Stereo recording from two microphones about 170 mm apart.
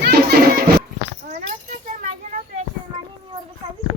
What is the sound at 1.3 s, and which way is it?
Children playing, 45° right (ahead or behind).